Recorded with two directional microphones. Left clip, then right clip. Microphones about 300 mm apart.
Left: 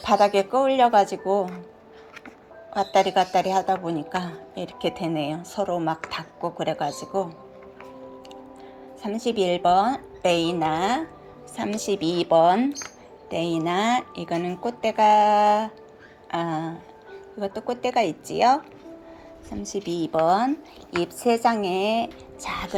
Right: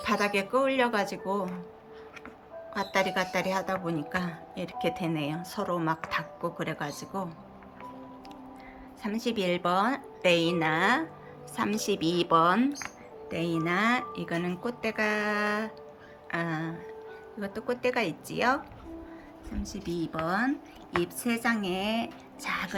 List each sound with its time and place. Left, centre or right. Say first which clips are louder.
0.0 s speech: left 9 dB; centre
2.7 s speech: left 8 dB; centre
9.0 s speech: left 7 dB; centre
19.6 s speech: left 7 dB; centre
21.2 s speech: left 11 dB; right
21.6 s speech: left 8 dB; centre
21.8 s speech: left 8 dB; centre
22.4 s speech: left 2 dB; centre